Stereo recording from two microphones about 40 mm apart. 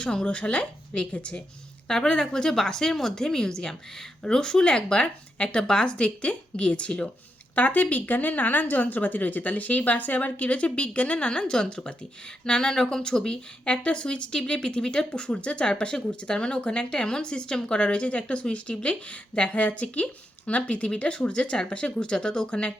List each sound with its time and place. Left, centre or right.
0.0 s speech: centre
0.3 s speech: left
1.9 s speech: centre
7.5 s speech: left; by 13.4 s centre
13.7 s speech: left